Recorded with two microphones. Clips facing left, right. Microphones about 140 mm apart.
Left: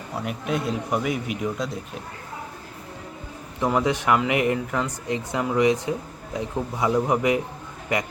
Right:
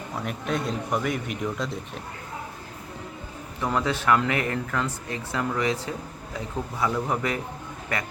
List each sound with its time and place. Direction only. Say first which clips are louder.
0.3 s speech: left 2 dB; 5° left (ahead or behind)
3.7 s speech: left 2 dB; 15° left (ahead or behind)